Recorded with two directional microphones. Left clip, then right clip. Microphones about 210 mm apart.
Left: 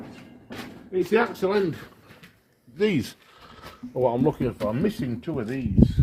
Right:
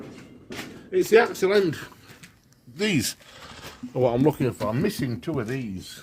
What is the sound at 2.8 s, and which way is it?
Speech, 55° right (ahead or behind).